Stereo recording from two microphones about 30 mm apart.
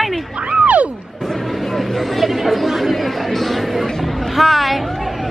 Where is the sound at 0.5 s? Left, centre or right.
Right.